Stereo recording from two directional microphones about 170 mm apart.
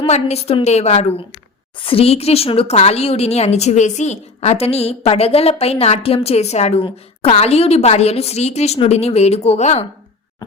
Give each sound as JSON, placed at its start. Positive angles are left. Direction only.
{"t": 0.0, "sound": "speech", "side_deg": 40}